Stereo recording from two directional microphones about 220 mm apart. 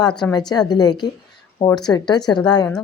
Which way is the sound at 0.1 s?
5° left (ahead or behind).